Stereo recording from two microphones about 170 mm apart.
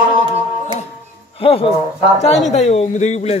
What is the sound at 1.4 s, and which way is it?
Speech, 30° left (ahead or behind).